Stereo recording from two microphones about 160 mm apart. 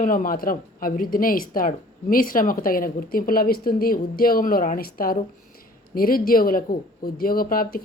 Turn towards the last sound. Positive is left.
turn(degrees=65)  # may be behind; listen again after turning